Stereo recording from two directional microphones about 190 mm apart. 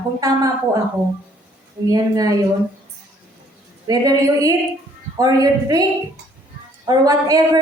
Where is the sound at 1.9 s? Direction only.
20° right (ahead or behind).